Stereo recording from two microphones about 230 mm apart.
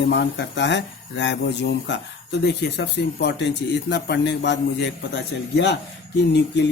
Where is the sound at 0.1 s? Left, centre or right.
Left.